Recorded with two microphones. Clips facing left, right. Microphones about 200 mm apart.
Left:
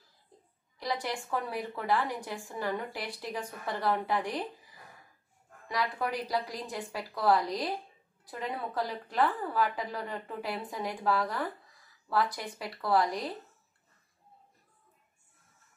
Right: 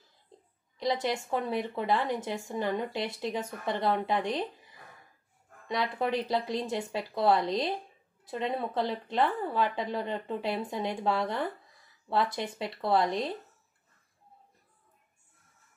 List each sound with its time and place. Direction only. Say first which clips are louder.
0.7 s a woman's voice: right 5 dB; 20° right (ahead or behind)